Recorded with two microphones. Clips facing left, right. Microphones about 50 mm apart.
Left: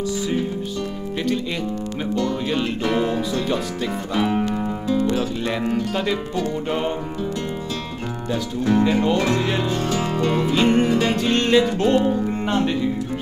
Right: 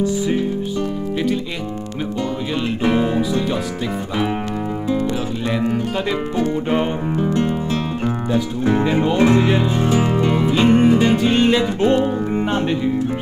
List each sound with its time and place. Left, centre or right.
2.8 s music: centre
4.2 s music: centre
5.1 s speech: centre
6.3 s music: right
9.1 s speech: right